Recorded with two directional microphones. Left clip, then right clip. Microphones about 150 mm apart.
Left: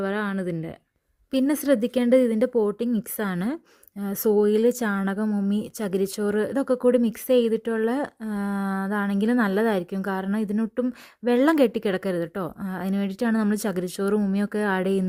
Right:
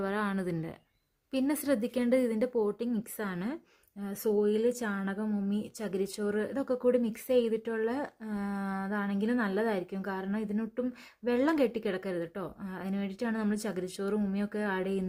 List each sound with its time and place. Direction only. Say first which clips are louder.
0.0 s speech: left 6 dB; 30° left (ahead or behind)
1.3 s speech: left 8 dB; 55° left (ahead or behind)